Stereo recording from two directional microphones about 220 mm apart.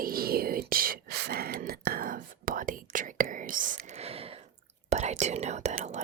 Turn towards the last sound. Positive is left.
turn(degrees=-30)  # may be behind; listen again after turning